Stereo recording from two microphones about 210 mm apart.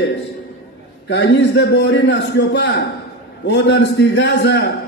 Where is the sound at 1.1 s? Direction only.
55° left (ahead or behind).